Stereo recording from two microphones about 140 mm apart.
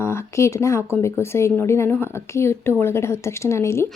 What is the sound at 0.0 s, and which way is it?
A woman's voice, 20° left (ahead or behind).